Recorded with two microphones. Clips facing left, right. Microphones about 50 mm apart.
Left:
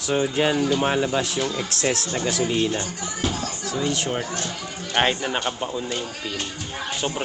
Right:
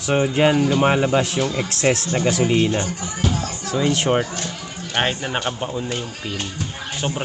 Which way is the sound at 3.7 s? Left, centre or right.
Right.